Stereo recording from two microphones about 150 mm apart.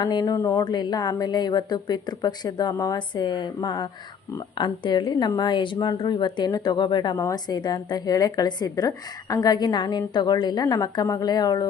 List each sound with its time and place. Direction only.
0.0 s a woman's voice: 25° left (ahead or behind)